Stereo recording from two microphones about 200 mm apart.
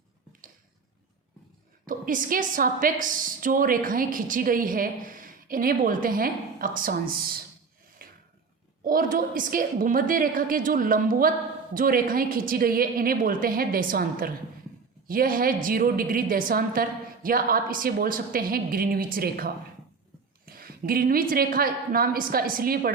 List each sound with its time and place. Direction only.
1.9 s a woman's voice: 40° right (ahead or behind)
8.0 s a sound: 45° right (ahead or behind)
8.8 s a woman's voice: 45° right (ahead or behind)